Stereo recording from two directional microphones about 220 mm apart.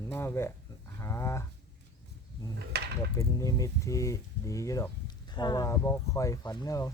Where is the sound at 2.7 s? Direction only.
50° right (ahead or behind).